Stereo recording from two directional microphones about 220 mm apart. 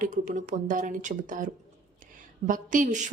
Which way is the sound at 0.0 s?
35° right (ahead or behind).